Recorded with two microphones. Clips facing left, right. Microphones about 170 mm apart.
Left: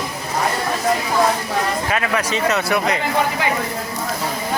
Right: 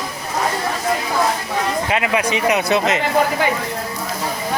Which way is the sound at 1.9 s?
20° right (ahead or behind).